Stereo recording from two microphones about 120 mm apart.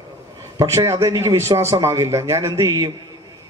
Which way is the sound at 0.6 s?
25° right (ahead or behind).